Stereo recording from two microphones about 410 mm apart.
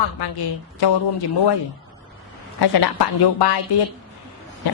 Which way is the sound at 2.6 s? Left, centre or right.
Left.